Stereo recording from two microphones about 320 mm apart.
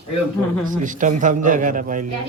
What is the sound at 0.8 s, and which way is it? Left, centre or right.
A man's voice, right.